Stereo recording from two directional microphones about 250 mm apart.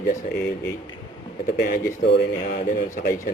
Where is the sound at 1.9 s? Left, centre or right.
Left.